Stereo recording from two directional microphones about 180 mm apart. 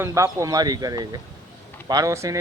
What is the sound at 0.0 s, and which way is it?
A man's voice, 15° right (ahead or behind).